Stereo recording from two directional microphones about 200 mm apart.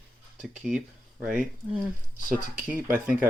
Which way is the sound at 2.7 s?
10° right (ahead or behind).